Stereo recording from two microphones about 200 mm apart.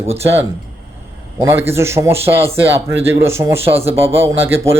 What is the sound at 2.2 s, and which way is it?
Speech, 30° right (ahead or behind).